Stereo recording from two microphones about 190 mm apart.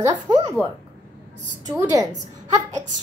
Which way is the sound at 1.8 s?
15° right (ahead or behind).